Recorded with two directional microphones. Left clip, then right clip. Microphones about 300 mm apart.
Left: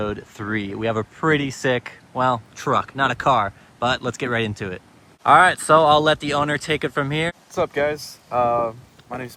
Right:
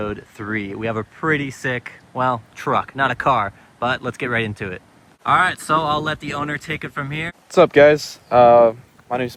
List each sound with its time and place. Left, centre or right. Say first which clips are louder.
0.0 s speech: even; centre
7.5 s speech: right 12 dB; right